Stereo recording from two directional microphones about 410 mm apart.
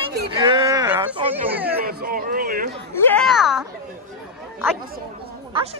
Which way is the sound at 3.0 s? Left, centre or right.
Centre.